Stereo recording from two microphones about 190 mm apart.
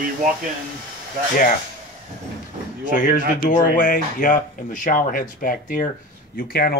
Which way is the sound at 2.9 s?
45° left (ahead or behind).